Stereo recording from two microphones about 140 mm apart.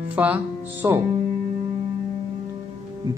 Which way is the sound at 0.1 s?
10° right (ahead or behind).